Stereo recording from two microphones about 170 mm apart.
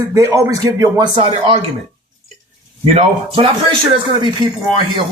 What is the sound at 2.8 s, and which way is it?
Speech, 40° right (ahead or behind).